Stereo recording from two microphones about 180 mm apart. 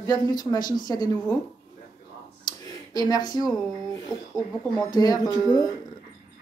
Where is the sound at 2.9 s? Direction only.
20° left (ahead or behind).